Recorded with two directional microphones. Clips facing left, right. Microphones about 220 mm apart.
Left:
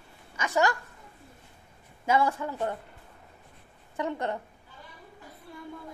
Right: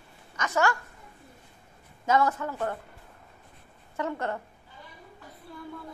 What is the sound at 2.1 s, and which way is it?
Speech, 10° left (ahead or behind).